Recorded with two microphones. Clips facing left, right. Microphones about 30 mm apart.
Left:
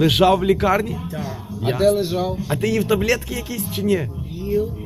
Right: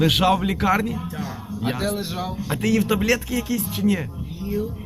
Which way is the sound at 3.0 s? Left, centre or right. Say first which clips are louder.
Even; left.